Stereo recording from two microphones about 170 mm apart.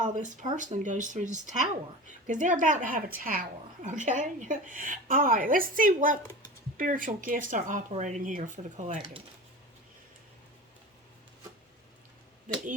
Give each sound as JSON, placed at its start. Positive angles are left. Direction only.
{"t": 0.0, "sound": "a woman's voice", "side_deg": -50}